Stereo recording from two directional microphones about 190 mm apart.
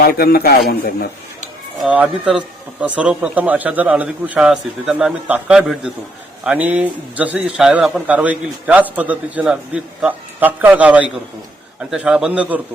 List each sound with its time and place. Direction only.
0.2 s a man's voice: 55° left (ahead or behind)
1.8 s a man's voice: 5° right (ahead or behind)